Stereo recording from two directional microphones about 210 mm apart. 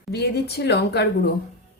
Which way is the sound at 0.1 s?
50° left (ahead or behind).